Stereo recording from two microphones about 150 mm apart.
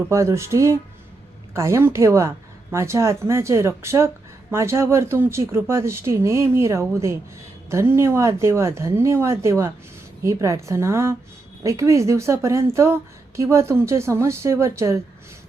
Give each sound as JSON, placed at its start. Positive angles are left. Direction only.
{"t": 0.1, "sound": "a woman's voice", "side_deg": -20}